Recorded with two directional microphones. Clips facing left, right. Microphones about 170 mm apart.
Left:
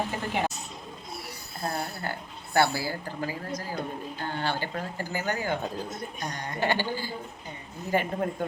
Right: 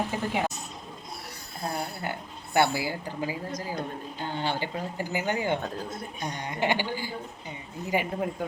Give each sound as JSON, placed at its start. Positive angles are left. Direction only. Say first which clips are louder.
{"t": 0.1, "sound": "speech", "louder": "right 1 dB", "side_deg": 0}
{"t": 1.7, "sound": "speech", "louder": "right 3 dB", "side_deg": -15}